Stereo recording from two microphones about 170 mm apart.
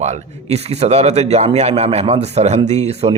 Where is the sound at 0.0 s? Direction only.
40° right (ahead or behind).